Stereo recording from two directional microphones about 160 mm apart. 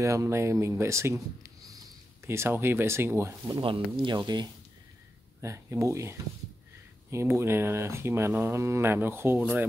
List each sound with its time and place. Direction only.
0.0 s speech: 20° right (ahead or behind)